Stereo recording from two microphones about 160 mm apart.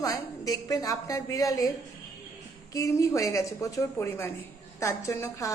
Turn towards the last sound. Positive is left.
turn(degrees=20)  # may be behind; listen again after turning